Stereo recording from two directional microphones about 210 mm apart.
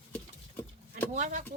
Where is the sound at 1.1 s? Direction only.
35° right (ahead or behind).